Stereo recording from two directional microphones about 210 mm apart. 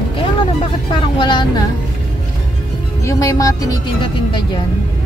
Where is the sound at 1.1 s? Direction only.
20° left (ahead or behind).